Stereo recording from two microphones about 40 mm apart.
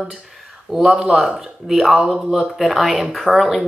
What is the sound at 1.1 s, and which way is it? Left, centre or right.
Speech, centre.